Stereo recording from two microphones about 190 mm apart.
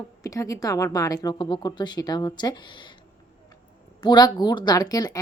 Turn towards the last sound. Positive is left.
turn(degrees=20)  # may be behind; listen again after turning